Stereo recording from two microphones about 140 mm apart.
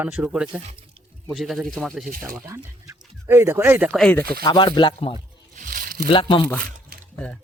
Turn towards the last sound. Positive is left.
turn(degrees=-75)  # may be behind; listen again after turning